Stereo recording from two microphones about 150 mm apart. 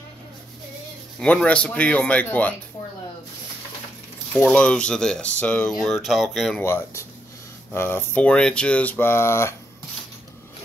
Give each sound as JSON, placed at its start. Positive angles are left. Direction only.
{"t": 1.2, "sound": "speech", "side_deg": 10}
{"t": 4.4, "sound": "speech", "side_deg": 5}
{"t": 6.6, "sound": "speech", "side_deg": 20}